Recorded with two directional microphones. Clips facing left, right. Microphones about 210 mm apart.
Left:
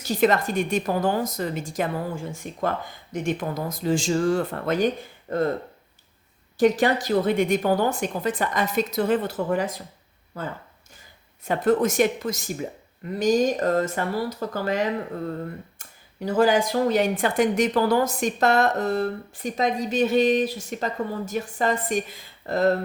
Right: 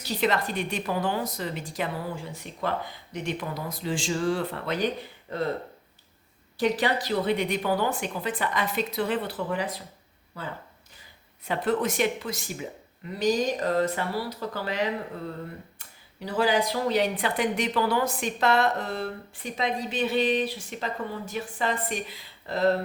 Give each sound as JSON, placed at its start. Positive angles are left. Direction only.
{"t": 0.0, "sound": "speech", "side_deg": 45}
{"t": 6.6, "sound": "speech", "side_deg": 45}